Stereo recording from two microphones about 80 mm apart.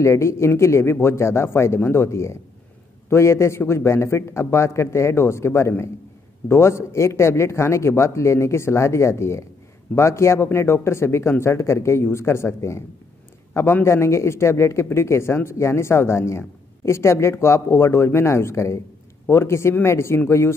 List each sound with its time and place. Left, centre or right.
0.0 s speech: left